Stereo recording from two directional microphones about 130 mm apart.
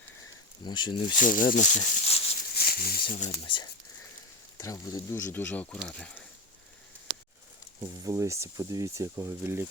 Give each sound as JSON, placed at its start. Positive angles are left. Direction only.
{"t": 0.6, "sound": "speech", "side_deg": 35}
{"t": 1.1, "sound": "speech", "side_deg": 85}
{"t": 2.6, "sound": "speech", "side_deg": 90}
{"t": 3.2, "sound": "speech", "side_deg": 40}
{"t": 4.5, "sound": "speech", "side_deg": 25}
{"t": 7.9, "sound": "speech", "side_deg": -25}